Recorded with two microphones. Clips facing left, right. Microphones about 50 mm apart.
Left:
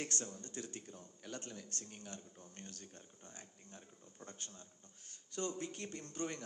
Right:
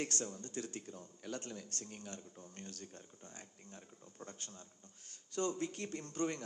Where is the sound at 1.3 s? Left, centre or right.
Right.